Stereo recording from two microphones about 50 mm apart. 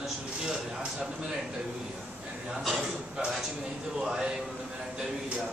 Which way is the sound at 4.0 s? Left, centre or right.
Centre.